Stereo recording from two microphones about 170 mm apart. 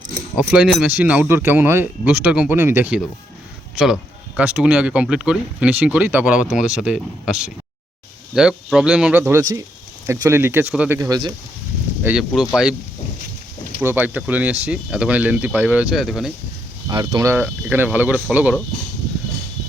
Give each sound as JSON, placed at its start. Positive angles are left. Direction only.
{"t": 0.3, "sound": "speech", "side_deg": -5}
{"t": 12.0, "sound": "speech", "side_deg": -5}
{"t": 13.8, "sound": "speech", "side_deg": -10}
{"t": 16.9, "sound": "speech", "side_deg": -25}
{"t": 17.3, "sound": "speech", "side_deg": -10}